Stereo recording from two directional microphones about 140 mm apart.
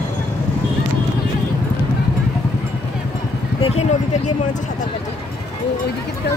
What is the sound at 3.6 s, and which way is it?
Speech, 50° left (ahead or behind).